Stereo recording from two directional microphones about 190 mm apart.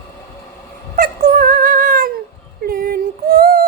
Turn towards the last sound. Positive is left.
turn(degrees=-50)  # may be behind; listen again after turning